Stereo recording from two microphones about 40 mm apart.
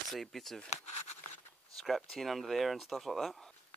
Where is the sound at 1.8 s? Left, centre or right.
Centre.